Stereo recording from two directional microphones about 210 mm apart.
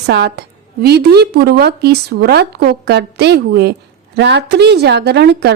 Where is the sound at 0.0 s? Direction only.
50° right (ahead or behind).